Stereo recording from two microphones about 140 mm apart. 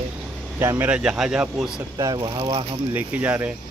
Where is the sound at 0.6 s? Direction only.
15° right (ahead or behind).